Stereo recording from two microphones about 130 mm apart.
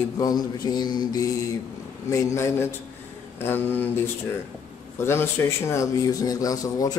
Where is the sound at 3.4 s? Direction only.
15° left (ahead or behind).